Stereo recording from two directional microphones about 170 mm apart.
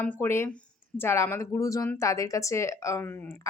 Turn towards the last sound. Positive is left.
turn(degrees=15)  # may be behind; listen again after turning